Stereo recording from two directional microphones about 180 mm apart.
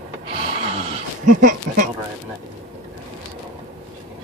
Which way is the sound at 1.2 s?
45° right (ahead or behind).